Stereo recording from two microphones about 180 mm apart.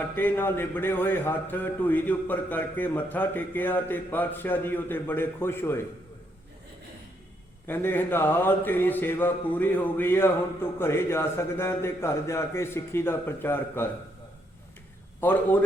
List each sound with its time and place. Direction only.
0.0 s speech: 10° left (ahead or behind)
7.7 s speech: 10° left (ahead or behind)
15.2 s speech: 10° left (ahead or behind)